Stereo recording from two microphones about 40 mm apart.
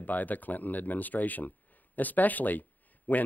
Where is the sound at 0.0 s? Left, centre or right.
Left.